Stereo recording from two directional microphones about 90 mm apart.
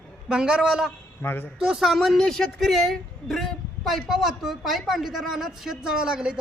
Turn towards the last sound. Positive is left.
turn(degrees=-10)  # may be behind; listen again after turning